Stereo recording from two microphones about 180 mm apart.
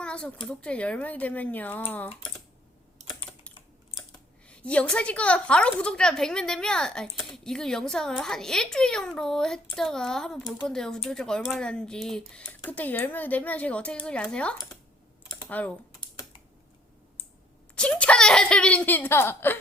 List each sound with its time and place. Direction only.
0.0 s a sound: 5° left (ahead or behind)
0.4 s speech: 5° left (ahead or behind)
4.4 s a woman's voice: 5° left (ahead or behind)
15.4 s typing: 10° left (ahead or behind)
17.7 s speech: 5° left (ahead or behind)